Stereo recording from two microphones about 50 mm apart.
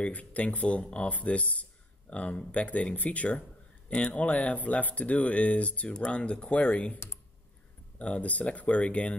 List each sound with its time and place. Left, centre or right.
0.0 s speech: left
8.0 s speech: left